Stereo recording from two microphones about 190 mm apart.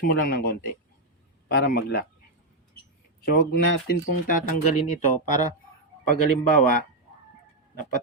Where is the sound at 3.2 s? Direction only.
50° left (ahead or behind).